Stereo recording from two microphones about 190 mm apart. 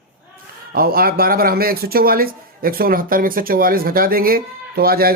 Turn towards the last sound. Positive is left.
turn(degrees=-50)  # may be behind; listen again after turning